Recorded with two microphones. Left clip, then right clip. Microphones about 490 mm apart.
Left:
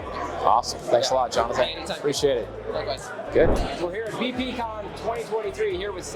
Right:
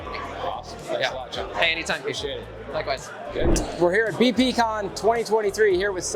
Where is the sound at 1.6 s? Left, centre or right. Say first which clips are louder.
Right 6 dB; right.